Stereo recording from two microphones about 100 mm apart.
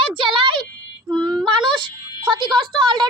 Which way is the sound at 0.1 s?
55° right (ahead or behind).